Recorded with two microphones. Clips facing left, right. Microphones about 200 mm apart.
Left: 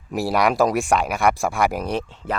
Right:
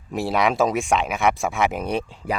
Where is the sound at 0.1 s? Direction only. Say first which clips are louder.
Left 1 dB; centre (ahead or behind).